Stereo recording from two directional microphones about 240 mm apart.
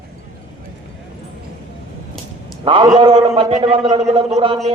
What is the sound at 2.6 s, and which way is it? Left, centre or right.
A man's voice, right.